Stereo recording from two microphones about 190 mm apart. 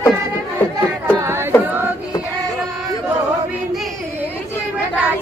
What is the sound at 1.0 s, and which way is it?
Chatter, 15° right (ahead or behind).